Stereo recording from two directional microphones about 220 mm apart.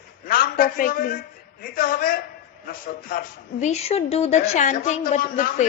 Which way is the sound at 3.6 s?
30° left (ahead or behind).